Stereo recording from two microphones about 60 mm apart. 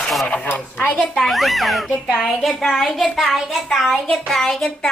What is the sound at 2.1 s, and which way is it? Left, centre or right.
Speech, centre.